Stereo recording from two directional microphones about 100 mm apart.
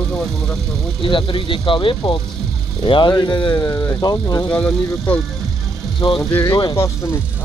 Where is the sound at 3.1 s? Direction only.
45° left (ahead or behind).